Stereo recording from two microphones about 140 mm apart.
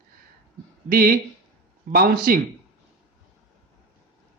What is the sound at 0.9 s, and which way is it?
A man's voice, 90° right.